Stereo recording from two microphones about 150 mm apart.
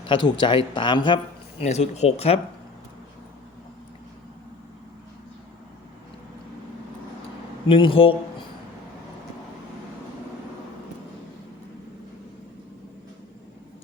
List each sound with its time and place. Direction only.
0.1 s speech: 30° left (ahead or behind)
1.6 s speech: 45° left (ahead or behind)
7.7 s speech: 35° left (ahead or behind)